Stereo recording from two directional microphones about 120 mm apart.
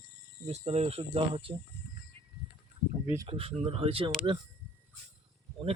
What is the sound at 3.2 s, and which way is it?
Speech, 50° right (ahead or behind).